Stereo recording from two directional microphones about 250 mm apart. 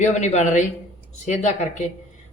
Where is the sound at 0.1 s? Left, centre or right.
Left.